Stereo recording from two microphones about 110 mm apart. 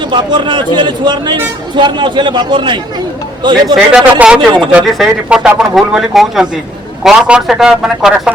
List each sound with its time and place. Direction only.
0.1 s a man's voice: 45° right (ahead or behind)
4.7 s speech: 5° right (ahead or behind)